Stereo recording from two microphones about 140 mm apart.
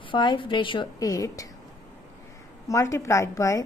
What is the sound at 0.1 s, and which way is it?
A woman's voice, 35° left (ahead or behind).